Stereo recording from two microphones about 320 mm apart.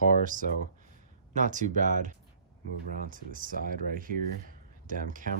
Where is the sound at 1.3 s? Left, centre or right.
Right.